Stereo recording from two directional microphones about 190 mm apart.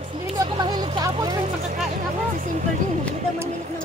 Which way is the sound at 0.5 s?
25° right (ahead or behind).